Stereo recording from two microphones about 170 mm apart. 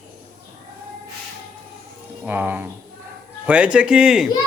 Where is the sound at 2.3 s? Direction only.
10° right (ahead or behind).